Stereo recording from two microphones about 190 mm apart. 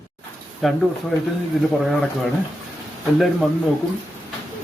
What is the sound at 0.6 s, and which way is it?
Speech, centre (ahead or behind).